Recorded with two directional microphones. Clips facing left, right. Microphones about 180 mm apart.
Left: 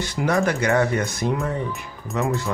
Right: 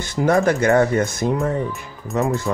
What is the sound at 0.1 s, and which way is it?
Speech, 50° right (ahead or behind).